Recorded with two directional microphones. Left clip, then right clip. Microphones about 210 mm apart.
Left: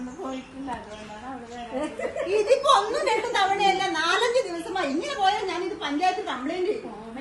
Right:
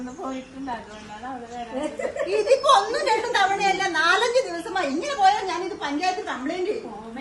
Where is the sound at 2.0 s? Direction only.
Centre (ahead or behind).